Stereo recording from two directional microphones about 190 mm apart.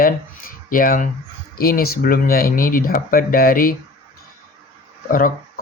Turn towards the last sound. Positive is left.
turn(degrees=50)  # may be behind; listen again after turning